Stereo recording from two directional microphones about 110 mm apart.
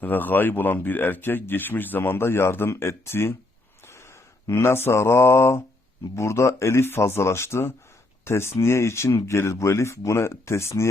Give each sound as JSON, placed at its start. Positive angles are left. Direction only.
{"t": 0.0, "sound": "speech", "side_deg": 15}
{"t": 4.4, "sound": "speech", "side_deg": 25}